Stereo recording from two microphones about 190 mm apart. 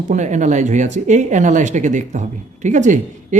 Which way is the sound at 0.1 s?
40° right (ahead or behind).